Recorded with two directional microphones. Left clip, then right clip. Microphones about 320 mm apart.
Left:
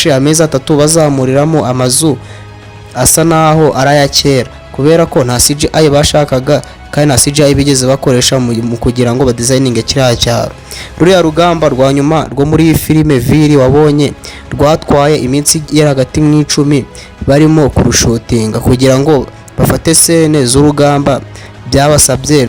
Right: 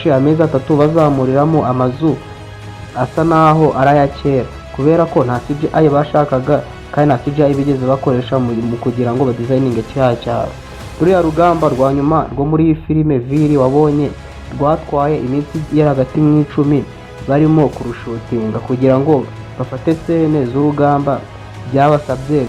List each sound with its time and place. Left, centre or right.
0.0 s speech: left